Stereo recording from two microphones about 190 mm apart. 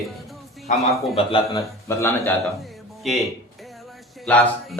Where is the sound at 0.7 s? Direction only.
40° left (ahead or behind).